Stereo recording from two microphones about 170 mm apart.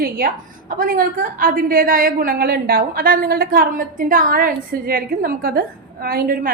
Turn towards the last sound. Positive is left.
turn(degrees=-55)  # may be behind; listen again after turning